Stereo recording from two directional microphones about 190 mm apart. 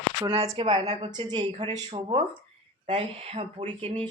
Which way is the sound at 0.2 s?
30° right (ahead or behind).